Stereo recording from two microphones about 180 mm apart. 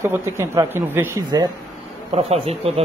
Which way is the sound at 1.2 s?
25° right (ahead or behind).